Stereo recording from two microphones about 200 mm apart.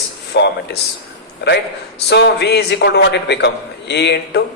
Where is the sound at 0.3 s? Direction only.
55° left (ahead or behind).